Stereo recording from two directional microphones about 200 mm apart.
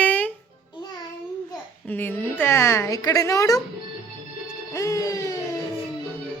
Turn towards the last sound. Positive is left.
turn(degrees=15)  # may be behind; listen again after turning